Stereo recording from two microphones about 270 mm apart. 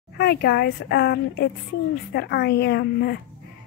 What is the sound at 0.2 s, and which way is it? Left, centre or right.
A woman's voice, left.